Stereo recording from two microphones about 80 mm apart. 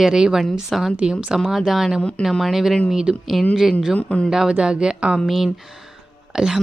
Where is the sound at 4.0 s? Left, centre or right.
Centre.